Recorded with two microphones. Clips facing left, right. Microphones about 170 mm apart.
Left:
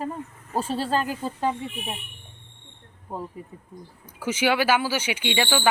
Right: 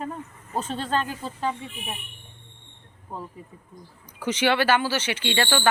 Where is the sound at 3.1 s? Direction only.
10° left (ahead or behind).